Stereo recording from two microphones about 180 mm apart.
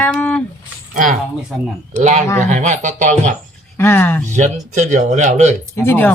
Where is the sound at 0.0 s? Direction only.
5° left (ahead or behind).